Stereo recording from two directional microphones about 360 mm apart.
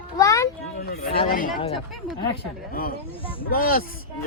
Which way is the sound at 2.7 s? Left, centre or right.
Left.